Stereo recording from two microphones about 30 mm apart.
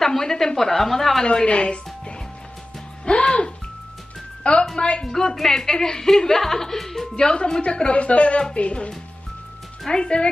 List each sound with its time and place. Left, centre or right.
0.0 s a woman's voice: centre
1.2 s speech: left
3.3 s speech: left
5.0 s a woman's voice: centre
5.7 s a woman's voice: left; by 7.1 s centre
7.2 s speech: left
7.9 s speech: left
9.8 s speech: left